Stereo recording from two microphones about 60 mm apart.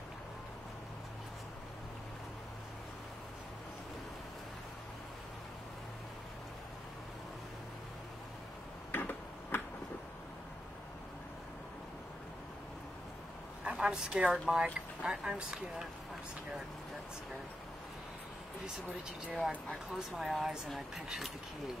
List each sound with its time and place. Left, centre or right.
8.9 s tick-tock: left
13.7 s a sound: centre
14.1 s speech: centre
19.7 s speech: centre